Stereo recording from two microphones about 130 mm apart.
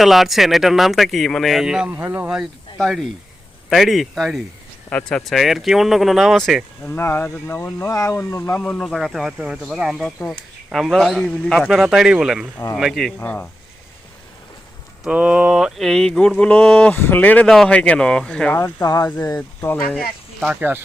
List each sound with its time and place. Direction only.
0.0 s speech: centre (ahead or behind)
2.3 s speech: centre (ahead or behind)
6.8 s speech: 20° left (ahead or behind)
8.6 s speech: 5° left (ahead or behind)
11.7 s speech: centre (ahead or behind)
13.1 s speech: 15° left (ahead or behind)
15.0 s speech: 10° right (ahead or behind)
18.5 s speech: 25° left (ahead or behind)
19.4 s speech: 10° left (ahead or behind)
19.9 s speech: 5° right (ahead or behind)